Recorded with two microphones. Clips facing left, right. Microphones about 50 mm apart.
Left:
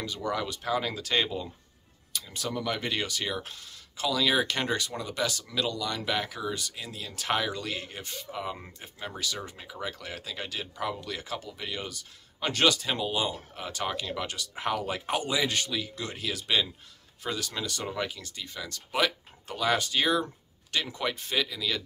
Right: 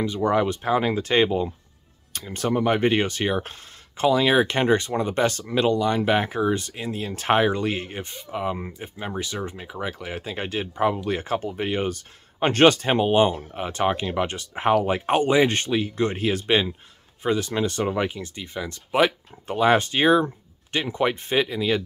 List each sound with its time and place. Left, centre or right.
0.0 s speech: right
2.1 s speech: right